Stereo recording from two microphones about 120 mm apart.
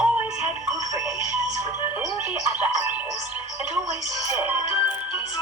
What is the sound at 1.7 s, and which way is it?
Music, 20° right (ahead or behind).